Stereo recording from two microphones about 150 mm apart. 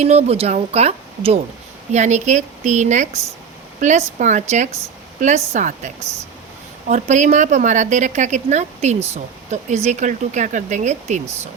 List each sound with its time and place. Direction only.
0.0 s a woman's voice: 45° right (ahead or behind)